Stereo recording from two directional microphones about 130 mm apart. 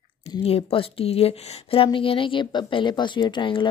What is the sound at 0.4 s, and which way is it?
Speech, 50° left (ahead or behind).